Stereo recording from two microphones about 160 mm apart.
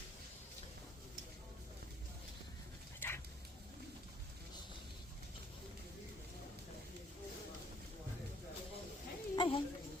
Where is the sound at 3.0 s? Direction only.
15° left (ahead or behind).